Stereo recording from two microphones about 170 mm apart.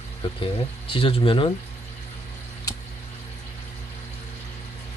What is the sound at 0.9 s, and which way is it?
Speech, 30° left (ahead or behind).